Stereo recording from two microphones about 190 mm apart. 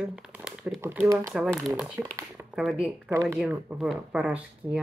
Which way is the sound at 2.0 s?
15° right (ahead or behind).